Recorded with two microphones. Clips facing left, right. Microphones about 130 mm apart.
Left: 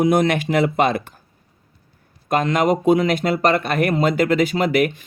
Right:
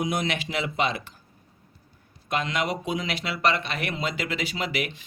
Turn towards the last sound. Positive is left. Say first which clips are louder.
# left 12 dB
turn(degrees=50)  # may be behind; listen again after turning